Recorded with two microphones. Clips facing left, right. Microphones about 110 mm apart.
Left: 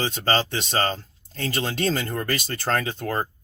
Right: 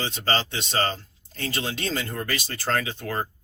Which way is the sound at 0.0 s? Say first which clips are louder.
Left 3 dB; 40° left (ahead or behind).